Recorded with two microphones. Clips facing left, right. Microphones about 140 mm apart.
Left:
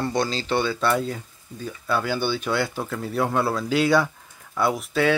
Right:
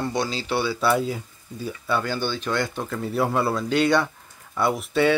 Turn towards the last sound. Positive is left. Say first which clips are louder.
# right 1 dB
turn(degrees=0)  # may be behind; listen again after turning